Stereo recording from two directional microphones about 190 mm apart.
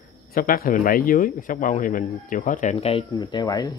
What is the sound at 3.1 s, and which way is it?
Speech, 20° left (ahead or behind).